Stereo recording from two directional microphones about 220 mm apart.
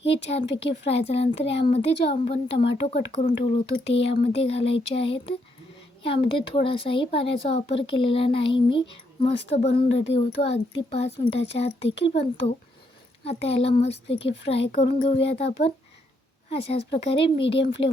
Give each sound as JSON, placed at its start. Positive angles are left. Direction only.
{"t": 0.0, "sound": "a woman's voice", "side_deg": 25}
{"t": 13.2, "sound": "a woman's voice", "side_deg": 25}